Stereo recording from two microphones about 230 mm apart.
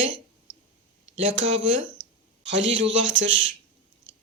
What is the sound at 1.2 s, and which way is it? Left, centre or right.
A man's voice, right.